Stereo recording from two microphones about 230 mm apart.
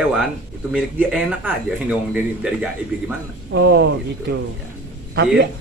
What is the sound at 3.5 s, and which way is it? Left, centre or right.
Speech, right.